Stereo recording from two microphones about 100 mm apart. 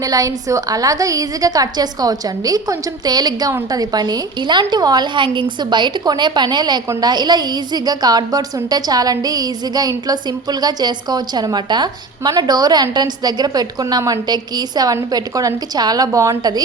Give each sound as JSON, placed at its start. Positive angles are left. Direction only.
{"t": 0.0, "sound": "a woman's voice", "side_deg": -35}